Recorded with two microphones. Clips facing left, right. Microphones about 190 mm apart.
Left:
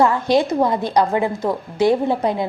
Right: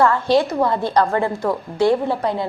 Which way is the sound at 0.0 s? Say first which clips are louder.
Even; 15° left (ahead or behind).